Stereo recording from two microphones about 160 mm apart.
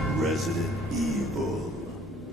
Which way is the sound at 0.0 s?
Centre (ahead or behind).